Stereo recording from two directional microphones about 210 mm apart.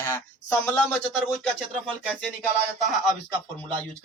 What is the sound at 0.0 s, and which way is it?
Speech, 10° left (ahead or behind).